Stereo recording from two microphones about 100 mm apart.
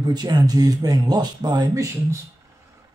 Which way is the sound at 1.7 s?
30° right (ahead or behind).